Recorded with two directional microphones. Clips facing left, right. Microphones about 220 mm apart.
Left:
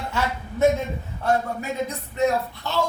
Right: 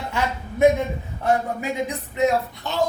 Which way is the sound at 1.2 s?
15° right (ahead or behind).